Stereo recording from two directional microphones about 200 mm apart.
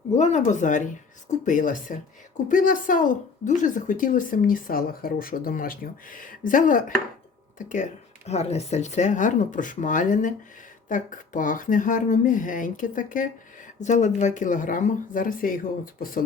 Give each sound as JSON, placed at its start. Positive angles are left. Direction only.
{"t": 0.1, "sound": "a woman's voice", "side_deg": 35}